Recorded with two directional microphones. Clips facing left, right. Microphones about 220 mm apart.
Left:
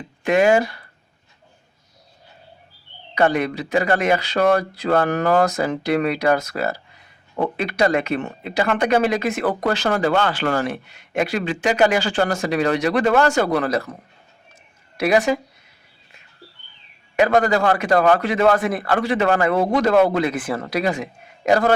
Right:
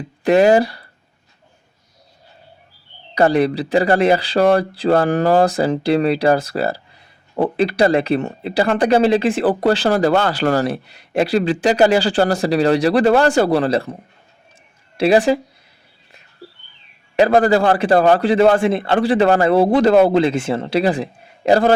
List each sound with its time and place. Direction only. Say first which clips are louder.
0.3 s speech: right 4 dB; 35° right (ahead or behind)
3.2 s a woman's voice: right 4 dB; 35° right (ahead or behind)
17.2 s speech: right 4 dB; 30° right (ahead or behind)